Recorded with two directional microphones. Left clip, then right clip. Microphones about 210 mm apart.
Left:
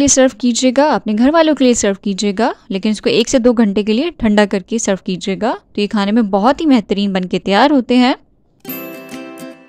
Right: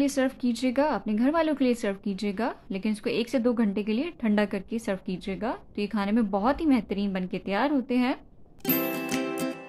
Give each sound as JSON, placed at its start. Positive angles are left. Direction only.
{"t": 0.0, "sound": "speech", "side_deg": 40}
{"t": 8.6, "sound": "music", "side_deg": 0}